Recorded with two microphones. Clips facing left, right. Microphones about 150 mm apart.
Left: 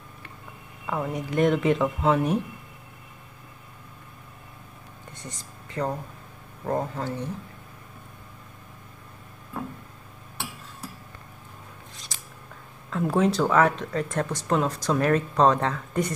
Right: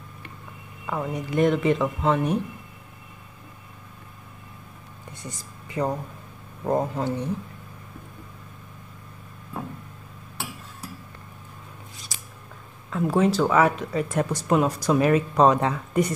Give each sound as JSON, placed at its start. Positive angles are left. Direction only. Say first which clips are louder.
{"t": 0.8, "sound": "speech", "louder": "even", "side_deg": 0}
{"t": 5.2, "sound": "speech", "louder": "right 2 dB", "side_deg": -10}
{"t": 12.1, "sound": "scissors", "louder": "even", "side_deg": -5}
{"t": 12.9, "sound": "speech", "louder": "right 1 dB", "side_deg": 0}